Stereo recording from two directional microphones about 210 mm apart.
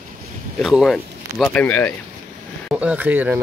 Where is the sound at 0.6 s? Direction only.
Centre (ahead or behind).